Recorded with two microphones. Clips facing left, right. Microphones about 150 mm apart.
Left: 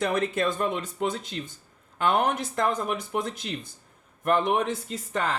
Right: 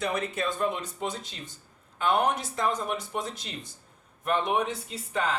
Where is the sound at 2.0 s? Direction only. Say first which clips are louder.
Left 1 dB; 50° left (ahead or behind).